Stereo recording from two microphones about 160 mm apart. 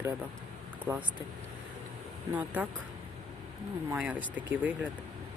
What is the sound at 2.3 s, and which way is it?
Speech, 10° right (ahead or behind).